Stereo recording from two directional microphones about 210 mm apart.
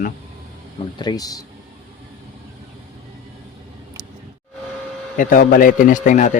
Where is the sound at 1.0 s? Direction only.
20° left (ahead or behind).